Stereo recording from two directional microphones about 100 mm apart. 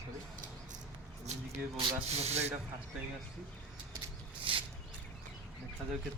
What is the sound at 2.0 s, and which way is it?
Speech, 90° right.